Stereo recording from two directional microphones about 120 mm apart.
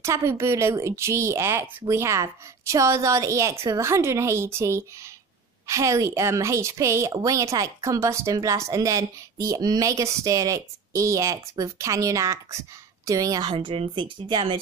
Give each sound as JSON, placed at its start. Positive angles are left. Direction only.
{"t": 0.0, "sound": "a woman's voice", "side_deg": -25}